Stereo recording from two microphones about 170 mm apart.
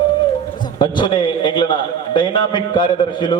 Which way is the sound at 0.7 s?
25° left (ahead or behind).